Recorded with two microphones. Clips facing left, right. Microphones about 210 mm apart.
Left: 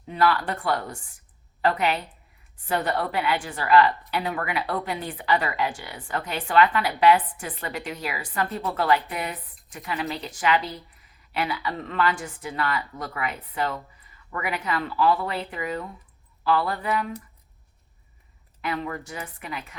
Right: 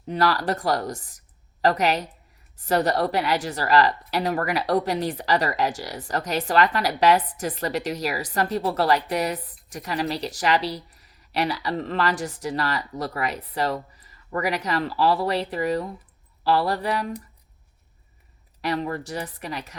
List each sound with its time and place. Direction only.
0.1 s a woman's voice: 40° right (ahead or behind)
18.6 s a woman's voice: 35° right (ahead or behind)